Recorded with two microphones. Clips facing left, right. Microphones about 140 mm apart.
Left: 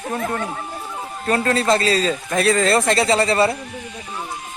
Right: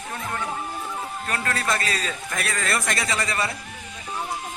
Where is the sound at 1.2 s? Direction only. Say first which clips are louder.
Left 10 dB; 30° left (ahead or behind).